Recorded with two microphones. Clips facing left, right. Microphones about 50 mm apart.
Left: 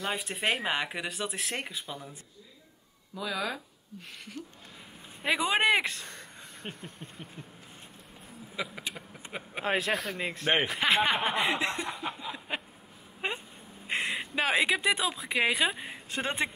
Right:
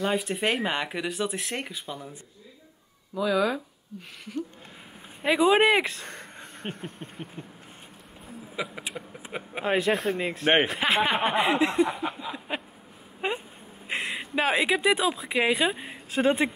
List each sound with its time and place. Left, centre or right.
0.0 s speech: centre
3.2 s speech: centre
5.2 s speech: centre
6.0 s a sound: right
8.5 s a man's voice: centre